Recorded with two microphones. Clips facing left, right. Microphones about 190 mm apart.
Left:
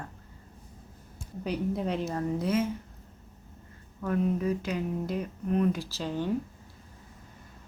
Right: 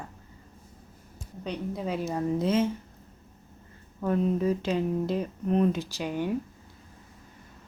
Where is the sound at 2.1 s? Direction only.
20° right (ahead or behind).